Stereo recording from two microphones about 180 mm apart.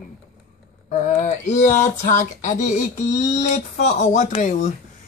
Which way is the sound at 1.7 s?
45° left (ahead or behind).